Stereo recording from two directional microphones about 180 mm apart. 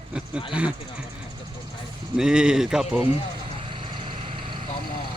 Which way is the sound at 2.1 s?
5° right (ahead or behind).